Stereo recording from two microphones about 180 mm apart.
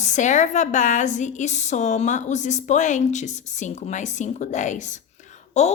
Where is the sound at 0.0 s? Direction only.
40° left (ahead or behind).